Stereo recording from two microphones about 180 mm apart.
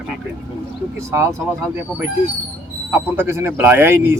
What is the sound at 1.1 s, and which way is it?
Speech, 15° right (ahead or behind).